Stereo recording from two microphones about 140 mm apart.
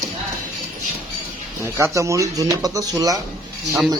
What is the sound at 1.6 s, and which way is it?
A man's voice, 20° right (ahead or behind).